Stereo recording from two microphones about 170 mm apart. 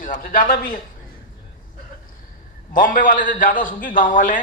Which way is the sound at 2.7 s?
55° left (ahead or behind).